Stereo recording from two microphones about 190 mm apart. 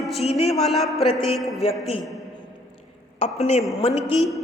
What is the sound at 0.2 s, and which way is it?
Speech, 35° left (ahead or behind).